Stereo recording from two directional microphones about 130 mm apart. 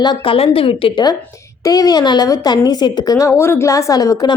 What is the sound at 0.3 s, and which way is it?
Speech, 45° left (ahead or behind).